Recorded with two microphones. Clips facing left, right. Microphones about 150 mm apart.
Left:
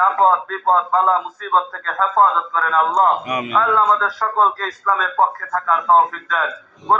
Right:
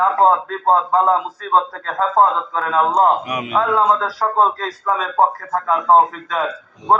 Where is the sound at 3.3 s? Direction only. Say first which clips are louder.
Even; 5° right (ahead or behind).